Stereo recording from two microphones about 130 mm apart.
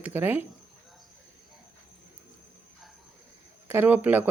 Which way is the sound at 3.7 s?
15° right (ahead or behind).